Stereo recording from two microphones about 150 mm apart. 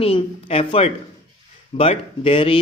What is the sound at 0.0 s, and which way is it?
Speech, 40° left (ahead or behind).